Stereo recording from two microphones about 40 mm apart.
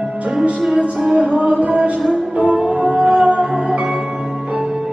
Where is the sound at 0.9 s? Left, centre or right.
Centre.